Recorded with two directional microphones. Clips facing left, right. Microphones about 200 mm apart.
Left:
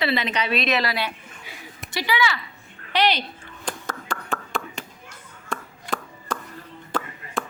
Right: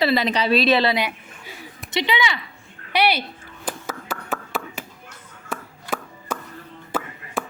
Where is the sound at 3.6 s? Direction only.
5° right (ahead or behind).